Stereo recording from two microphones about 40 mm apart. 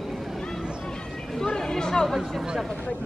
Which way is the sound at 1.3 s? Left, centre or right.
Centre.